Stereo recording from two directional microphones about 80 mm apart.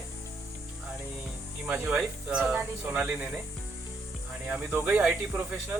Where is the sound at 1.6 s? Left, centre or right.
Centre.